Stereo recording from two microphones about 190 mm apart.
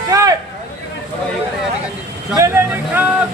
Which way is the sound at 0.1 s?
20° right (ahead or behind).